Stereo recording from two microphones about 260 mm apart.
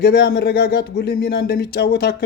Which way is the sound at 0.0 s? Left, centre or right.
Left.